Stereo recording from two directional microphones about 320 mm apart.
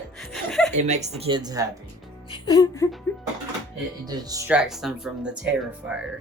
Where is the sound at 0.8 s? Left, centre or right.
Right.